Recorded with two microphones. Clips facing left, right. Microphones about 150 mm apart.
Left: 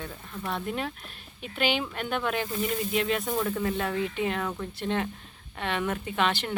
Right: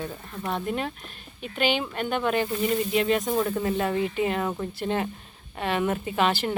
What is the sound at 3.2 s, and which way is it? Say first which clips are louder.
Speech: right 3 dB; 15° right (ahead or behind).